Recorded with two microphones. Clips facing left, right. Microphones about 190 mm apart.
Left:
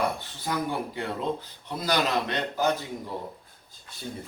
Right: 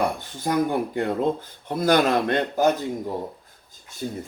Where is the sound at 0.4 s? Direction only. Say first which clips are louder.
Right 7 dB; 50° right (ahead or behind).